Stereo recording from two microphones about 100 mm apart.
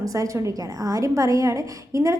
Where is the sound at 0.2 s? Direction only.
30° right (ahead or behind).